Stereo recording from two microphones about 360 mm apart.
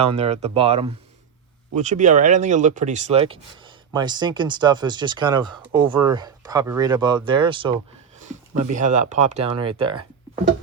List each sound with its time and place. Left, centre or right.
0.0 s speech: centre